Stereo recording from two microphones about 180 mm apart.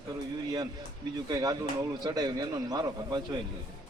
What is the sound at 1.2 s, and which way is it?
A man's voice, 20° right (ahead or behind).